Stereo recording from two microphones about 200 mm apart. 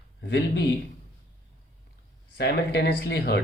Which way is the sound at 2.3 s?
55° left (ahead or behind).